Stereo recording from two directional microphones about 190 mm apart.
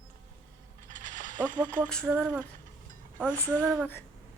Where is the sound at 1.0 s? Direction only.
45° right (ahead or behind).